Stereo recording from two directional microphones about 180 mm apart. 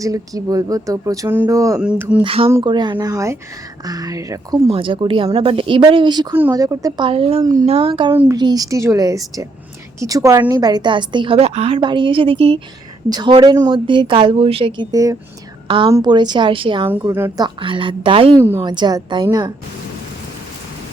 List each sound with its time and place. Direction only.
0.0 s a woman's voice: 20° right (ahead or behind)
1.8 s speech: 5° right (ahead or behind)
2.2 s a woman's voice: 30° right (ahead or behind)
4.7 s a woman's voice: 30° right (ahead or behind)
8.1 s a woman's voice: 10° right (ahead or behind); by 16.9 s 30° right (ahead or behind)
17.0 s a woman's voice: 15° right (ahead or behind)